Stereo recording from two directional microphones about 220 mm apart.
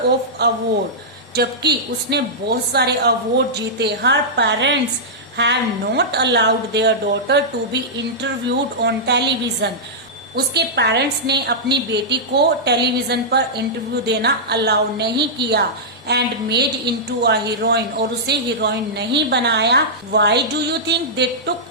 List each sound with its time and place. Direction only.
0.4 s a woman's voice: 50° right (ahead or behind)